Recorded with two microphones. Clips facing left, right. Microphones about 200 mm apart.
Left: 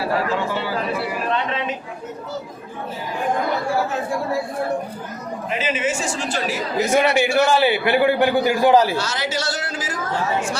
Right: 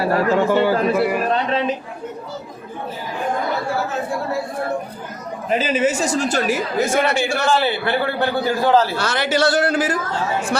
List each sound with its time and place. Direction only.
0.0 s a sound: 50° right (ahead or behind)
5.5 s speech: 40° right (ahead or behind)
6.9 s a man's voice: 15° left (ahead or behind)
9.0 s speech: 60° right (ahead or behind)